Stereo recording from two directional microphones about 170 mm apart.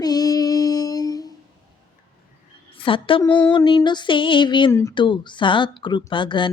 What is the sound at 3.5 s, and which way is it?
Speech, 25° left (ahead or behind).